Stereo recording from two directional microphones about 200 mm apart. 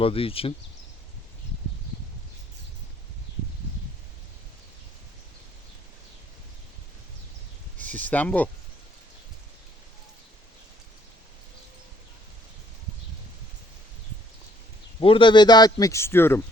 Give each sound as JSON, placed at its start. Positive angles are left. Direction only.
{"t": 0.0, "sound": "a man's voice", "side_deg": 30}
{"t": 7.8, "sound": "speech", "side_deg": 10}
{"t": 15.0, "sound": "a man's voice", "side_deg": 25}